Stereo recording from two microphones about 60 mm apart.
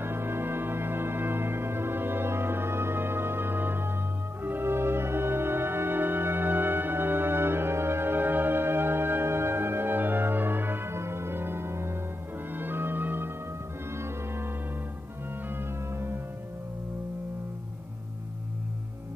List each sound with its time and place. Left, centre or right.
0.0 s music: right
13.9 s music: right
15.5 s music: right